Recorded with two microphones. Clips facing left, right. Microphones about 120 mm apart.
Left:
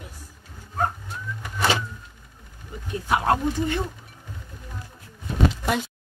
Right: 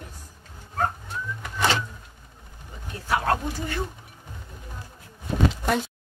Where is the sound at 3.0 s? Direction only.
20° left (ahead or behind).